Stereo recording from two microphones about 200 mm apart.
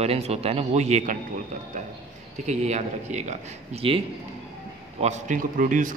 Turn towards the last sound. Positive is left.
turn(degrees=-40)  # may be behind; listen again after turning